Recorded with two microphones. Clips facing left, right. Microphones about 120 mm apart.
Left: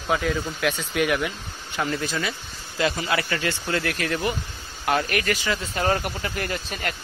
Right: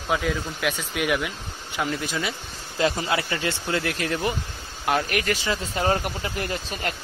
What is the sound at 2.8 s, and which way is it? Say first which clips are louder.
Speech: right 1 dB; 25° right (ahead or behind).